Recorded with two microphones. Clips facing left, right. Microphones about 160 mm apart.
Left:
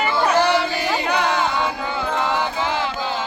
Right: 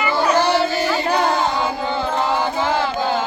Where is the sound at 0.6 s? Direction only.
40° right (ahead or behind).